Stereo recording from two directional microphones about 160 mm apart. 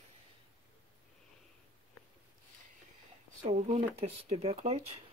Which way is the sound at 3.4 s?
45° right (ahead or behind).